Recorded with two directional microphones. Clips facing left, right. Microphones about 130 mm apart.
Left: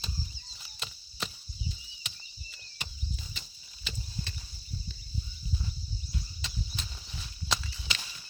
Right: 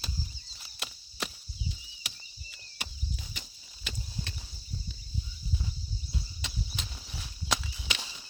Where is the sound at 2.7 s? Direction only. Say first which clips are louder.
Right 1 dB; 10° right (ahead or behind).